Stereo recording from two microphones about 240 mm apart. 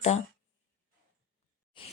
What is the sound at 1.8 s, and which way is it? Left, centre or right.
Speech, left.